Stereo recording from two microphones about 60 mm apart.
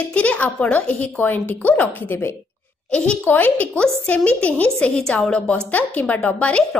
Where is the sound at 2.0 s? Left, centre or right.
Left.